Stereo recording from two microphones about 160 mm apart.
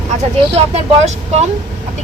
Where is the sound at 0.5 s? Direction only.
45° right (ahead or behind).